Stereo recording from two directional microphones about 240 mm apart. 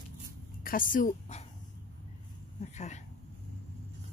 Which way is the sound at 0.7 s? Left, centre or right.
Left.